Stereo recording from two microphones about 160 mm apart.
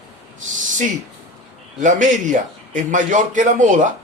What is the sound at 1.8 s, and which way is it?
Speech, 50° right (ahead or behind).